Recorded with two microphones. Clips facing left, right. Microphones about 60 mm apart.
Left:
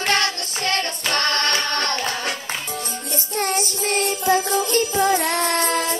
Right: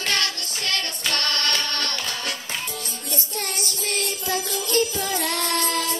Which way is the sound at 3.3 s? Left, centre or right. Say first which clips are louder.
Left 9 dB; left.